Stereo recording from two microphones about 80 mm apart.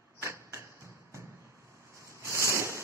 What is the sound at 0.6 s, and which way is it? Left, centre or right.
Music, right.